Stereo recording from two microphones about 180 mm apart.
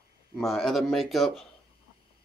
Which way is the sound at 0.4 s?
Centre (ahead or behind).